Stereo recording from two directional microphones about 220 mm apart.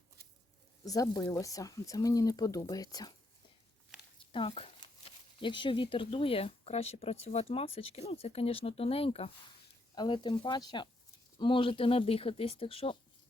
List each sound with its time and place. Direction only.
0.9 s speech: 15° left (ahead or behind)
4.3 s speech: 25° left (ahead or behind)